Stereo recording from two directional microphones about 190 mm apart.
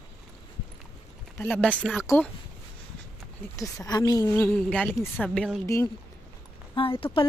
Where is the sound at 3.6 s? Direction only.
20° left (ahead or behind); by 5.6 s 5° left (ahead or behind).